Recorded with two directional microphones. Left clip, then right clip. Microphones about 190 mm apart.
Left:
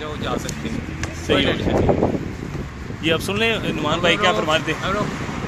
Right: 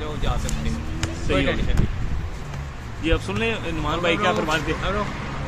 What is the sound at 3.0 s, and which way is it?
Speech, 30° left (ahead or behind).